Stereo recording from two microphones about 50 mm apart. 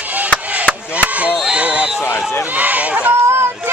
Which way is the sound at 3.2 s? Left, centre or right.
Right.